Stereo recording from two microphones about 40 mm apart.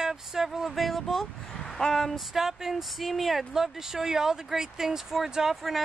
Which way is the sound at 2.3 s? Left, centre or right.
Centre.